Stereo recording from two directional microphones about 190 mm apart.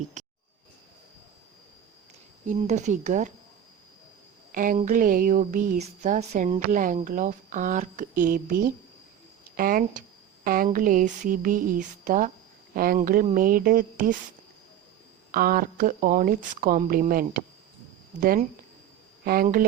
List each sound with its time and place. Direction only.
0.2 s a sound: 40° right (ahead or behind)
2.5 s speech: 40° right (ahead or behind)
4.5 s a woman's voice: 45° right (ahead or behind)
15.3 s a woman's voice: 50° right (ahead or behind)